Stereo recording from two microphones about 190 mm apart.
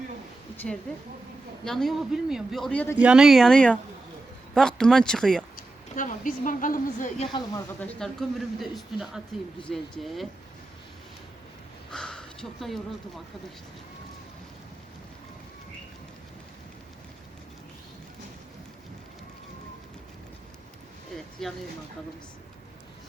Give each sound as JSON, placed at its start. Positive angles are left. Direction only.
{"t": 0.5, "sound": "a woman's voice", "side_deg": 10}
{"t": 5.9, "sound": "speech", "side_deg": 45}
{"t": 7.8, "sound": "speech", "side_deg": 5}
{"t": 11.9, "sound": "a sound", "side_deg": 5}
{"t": 21.4, "sound": "speech", "side_deg": 0}